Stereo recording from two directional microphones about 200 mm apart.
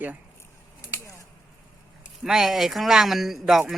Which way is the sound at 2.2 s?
Centre (ahead or behind).